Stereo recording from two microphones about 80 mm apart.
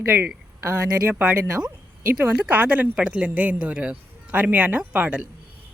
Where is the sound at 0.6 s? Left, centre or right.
Right.